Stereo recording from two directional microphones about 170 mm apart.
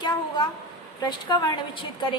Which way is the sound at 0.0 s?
25° left (ahead or behind).